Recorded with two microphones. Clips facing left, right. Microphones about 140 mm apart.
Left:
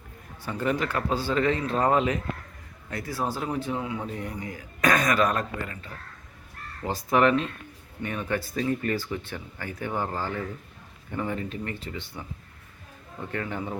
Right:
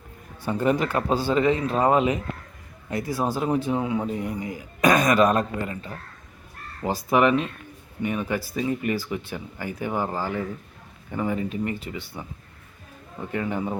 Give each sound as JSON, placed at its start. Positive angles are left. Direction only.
{"t": 0.4, "sound": "speech", "side_deg": -20}
{"t": 6.8, "sound": "speech", "side_deg": -10}
{"t": 13.3, "sound": "speech", "side_deg": -15}